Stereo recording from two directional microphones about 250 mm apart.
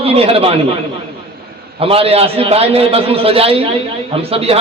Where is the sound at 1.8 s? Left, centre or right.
Right.